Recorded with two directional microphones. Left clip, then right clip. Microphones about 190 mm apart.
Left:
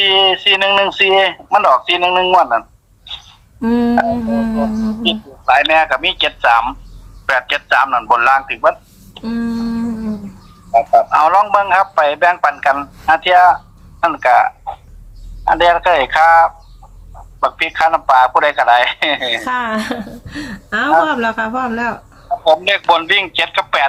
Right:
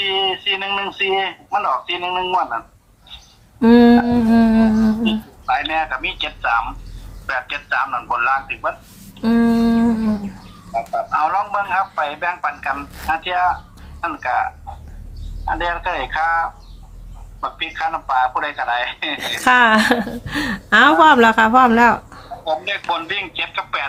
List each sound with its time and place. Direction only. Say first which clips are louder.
0.0 s speech: left 8 dB; 55° left (ahead or behind)
3.6 s humming: right 2 dB; 15° right (ahead or behind)
5.0 s speech: left 7 dB; 55° left (ahead or behind)
9.2 s a sound: right 5 dB; 25° right (ahead or behind)
10.8 s speech: left 9 dB; 55° left (ahead or behind)
19.5 s speech: right 6 dB; 25° right (ahead or behind)
22.4 s speech: left 9 dB; 55° left (ahead or behind)